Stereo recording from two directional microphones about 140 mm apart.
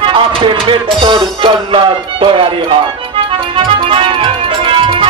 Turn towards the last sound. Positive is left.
turn(degrees=-40)  # may be behind; listen again after turning